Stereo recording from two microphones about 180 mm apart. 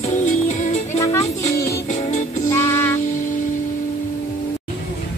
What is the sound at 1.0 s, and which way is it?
Music, 20° left (ahead or behind).